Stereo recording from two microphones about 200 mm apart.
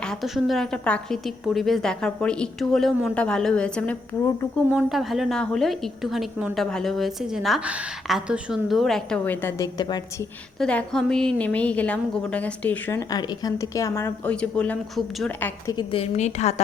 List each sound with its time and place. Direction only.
0.0 s a woman's voice: centre (ahead or behind); by 10.2 s 20° left (ahead or behind)
10.6 s a woman's voice: 5° left (ahead or behind)
15.7 s a woman's voice: 25° left (ahead or behind)